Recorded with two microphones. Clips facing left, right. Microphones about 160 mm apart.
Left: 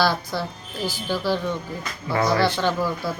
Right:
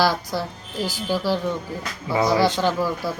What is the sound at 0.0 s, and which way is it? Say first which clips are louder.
Speech: right 1 dB; 10° right (ahead or behind).